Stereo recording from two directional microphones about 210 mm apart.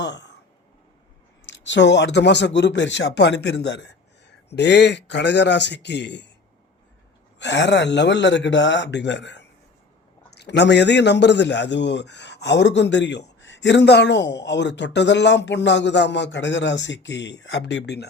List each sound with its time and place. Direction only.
0.0 s speech: 55° left (ahead or behind)
1.5 s a man's voice: 60° left (ahead or behind)
7.3 s a man's voice: 55° left (ahead or behind)